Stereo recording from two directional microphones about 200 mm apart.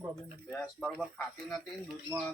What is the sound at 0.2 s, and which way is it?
Speech, centre (ahead or behind).